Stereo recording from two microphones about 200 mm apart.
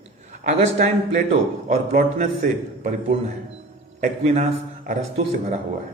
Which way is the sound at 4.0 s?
30° right (ahead or behind).